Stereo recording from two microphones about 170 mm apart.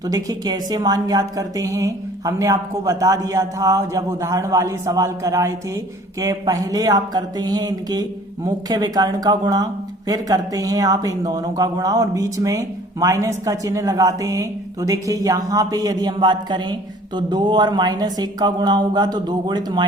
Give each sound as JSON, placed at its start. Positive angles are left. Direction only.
{"t": 0.1, "sound": "a woman's voice", "side_deg": -20}